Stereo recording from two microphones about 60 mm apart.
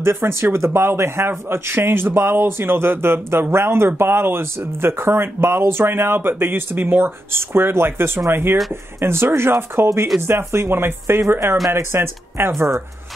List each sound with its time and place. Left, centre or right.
0.0 s a man's voice: right